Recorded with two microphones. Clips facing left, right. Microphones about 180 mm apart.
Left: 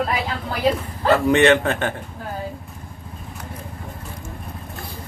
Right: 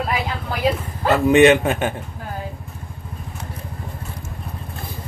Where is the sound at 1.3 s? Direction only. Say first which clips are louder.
Right 6 dB; 15° right (ahead or behind).